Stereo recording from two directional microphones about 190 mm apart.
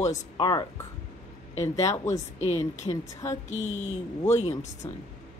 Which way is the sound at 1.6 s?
15° left (ahead or behind).